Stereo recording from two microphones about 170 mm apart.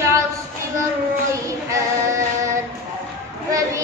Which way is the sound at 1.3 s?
20° right (ahead or behind).